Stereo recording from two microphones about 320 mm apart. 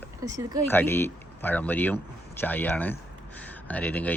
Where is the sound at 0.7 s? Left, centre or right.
Centre.